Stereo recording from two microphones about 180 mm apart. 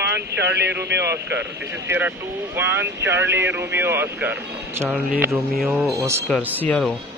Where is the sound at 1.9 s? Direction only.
10° right (ahead or behind).